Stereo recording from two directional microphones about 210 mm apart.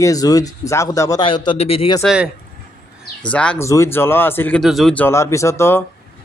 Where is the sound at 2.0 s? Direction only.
5° right (ahead or behind).